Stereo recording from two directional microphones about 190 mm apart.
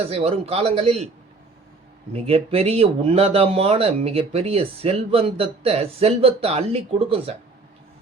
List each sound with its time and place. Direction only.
0.1 s speech: 30° right (ahead or behind)
2.1 s speech: 30° right (ahead or behind)